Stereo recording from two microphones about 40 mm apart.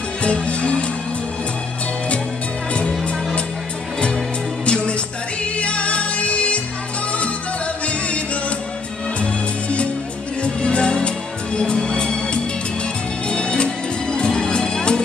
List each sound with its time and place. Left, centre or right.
0.2 s music: left
4.6 s music: left
7.8 s music: left